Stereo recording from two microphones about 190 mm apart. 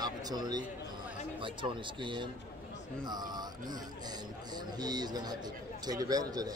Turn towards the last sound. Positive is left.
turn(degrees=-20)  # may be behind; listen again after turning